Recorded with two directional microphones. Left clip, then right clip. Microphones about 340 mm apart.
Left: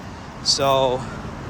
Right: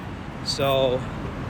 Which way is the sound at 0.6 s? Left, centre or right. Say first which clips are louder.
Left 2 dB; centre.